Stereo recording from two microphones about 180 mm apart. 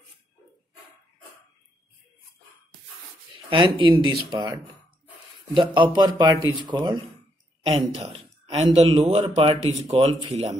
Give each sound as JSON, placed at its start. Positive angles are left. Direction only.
{"t": 3.4, "sound": "a man's voice", "side_deg": -25}
{"t": 8.0, "sound": "a sound", "side_deg": -35}
{"t": 8.7, "sound": "speech", "side_deg": -35}